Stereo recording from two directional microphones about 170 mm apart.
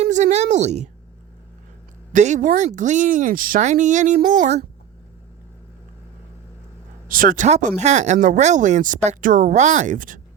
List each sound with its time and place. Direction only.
0.0 s a woman's voice: 45° right (ahead or behind)
2.1 s speech: 45° right (ahead or behind)
7.1 s speech: 55° right (ahead or behind)